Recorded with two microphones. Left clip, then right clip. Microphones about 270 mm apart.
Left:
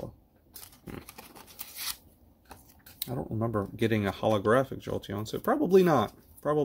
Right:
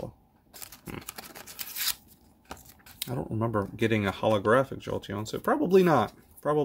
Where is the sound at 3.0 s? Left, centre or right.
Centre.